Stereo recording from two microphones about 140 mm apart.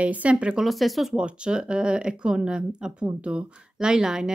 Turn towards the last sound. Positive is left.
turn(degrees=-5)  # may be behind; listen again after turning